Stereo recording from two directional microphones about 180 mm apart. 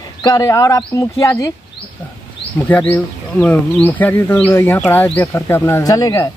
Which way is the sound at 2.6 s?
10° left (ahead or behind).